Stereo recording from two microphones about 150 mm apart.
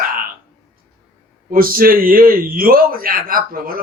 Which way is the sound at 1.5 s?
75° right (ahead or behind).